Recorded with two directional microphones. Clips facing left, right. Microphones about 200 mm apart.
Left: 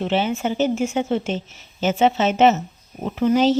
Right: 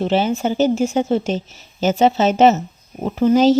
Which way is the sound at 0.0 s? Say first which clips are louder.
Right 3 dB; 40° right (ahead or behind).